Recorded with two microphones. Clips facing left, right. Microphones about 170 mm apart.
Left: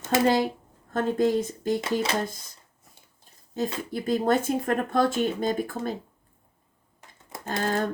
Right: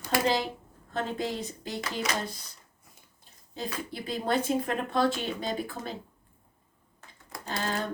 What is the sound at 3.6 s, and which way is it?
Speech, 45° left (ahead or behind).